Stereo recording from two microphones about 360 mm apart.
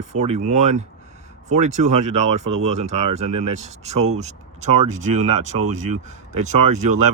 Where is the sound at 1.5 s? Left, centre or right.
Right.